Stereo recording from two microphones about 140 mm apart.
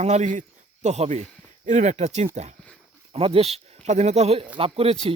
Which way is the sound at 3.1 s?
45° right (ahead or behind).